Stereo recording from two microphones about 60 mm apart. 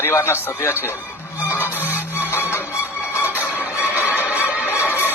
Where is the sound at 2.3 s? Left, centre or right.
Left.